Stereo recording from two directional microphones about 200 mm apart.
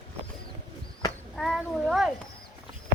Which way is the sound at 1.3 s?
Centre (ahead or behind).